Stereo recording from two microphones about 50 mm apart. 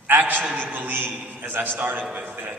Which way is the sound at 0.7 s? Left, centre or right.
Right.